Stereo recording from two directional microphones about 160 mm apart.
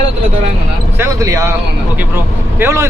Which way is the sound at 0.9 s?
15° right (ahead or behind).